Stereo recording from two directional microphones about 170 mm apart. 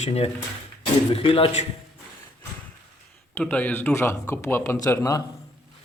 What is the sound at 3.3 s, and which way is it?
A man's voice, 10° left (ahead or behind).